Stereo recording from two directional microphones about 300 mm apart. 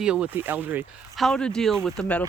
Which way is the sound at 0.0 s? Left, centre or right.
Centre.